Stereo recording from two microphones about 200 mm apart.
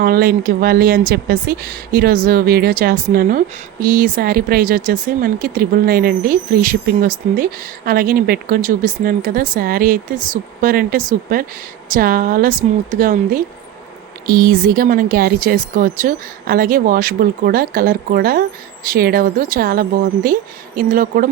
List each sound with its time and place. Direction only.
0.0 s speech: 50° right (ahead or behind)